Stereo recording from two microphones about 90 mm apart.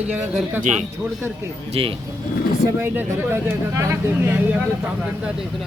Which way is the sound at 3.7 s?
35° right (ahead or behind).